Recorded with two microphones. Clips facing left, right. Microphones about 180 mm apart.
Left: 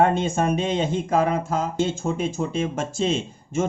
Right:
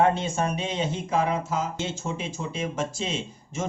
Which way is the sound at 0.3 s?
50° left (ahead or behind).